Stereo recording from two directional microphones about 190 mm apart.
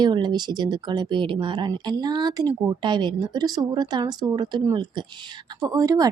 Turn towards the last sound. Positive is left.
turn(degrees=-20)  # may be behind; listen again after turning